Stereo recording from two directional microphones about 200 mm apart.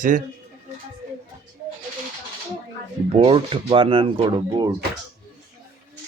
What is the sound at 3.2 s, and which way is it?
Speech, 25° right (ahead or behind).